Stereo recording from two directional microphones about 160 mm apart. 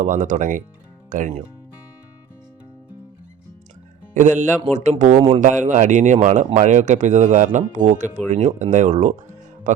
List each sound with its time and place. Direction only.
0.0 s speech: 55° right (ahead or behind)
4.1 s speech: 50° right (ahead or behind)